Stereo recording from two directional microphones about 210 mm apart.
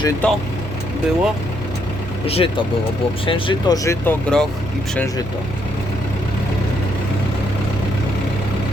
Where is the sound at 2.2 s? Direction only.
30° left (ahead or behind).